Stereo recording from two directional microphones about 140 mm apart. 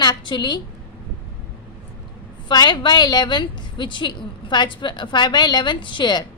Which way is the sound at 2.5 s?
30° left (ahead or behind).